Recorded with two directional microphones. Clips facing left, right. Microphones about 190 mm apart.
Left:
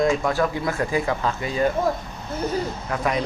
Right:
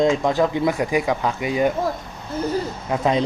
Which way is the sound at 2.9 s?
25° right (ahead or behind).